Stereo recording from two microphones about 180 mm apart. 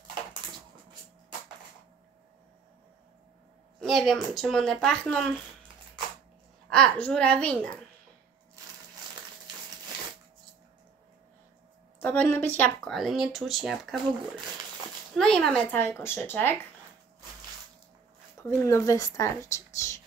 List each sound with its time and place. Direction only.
3.8 s speech: centre (ahead or behind)
6.7 s speech: 5° left (ahead or behind)
12.0 s speech: 10° left (ahead or behind)
18.4 s speech: 10° left (ahead or behind)